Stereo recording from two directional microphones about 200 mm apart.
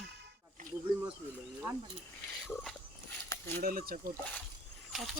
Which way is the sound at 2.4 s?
5° left (ahead or behind).